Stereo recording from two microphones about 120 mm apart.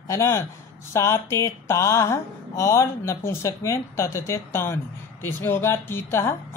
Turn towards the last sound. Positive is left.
turn(degrees=20)  # may be behind; listen again after turning